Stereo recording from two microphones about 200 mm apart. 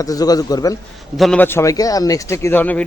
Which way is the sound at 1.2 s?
5° left (ahead or behind).